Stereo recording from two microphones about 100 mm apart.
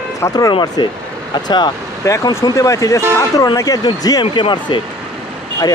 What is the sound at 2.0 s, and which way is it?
Speech, 35° left (ahead or behind).